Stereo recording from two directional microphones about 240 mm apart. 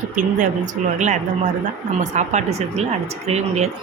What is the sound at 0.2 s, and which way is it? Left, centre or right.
Speech, right.